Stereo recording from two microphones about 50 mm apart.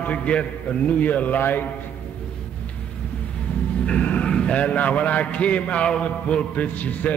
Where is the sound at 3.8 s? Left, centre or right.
Left.